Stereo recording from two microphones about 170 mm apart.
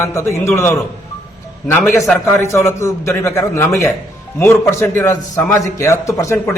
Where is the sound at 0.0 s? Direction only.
15° left (ahead or behind).